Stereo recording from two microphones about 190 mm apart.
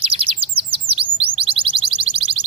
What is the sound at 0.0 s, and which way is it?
Chirp, 30° right (ahead or behind).